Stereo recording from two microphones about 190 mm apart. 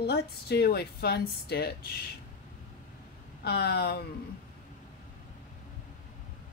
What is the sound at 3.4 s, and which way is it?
Speech, 60° left (ahead or behind).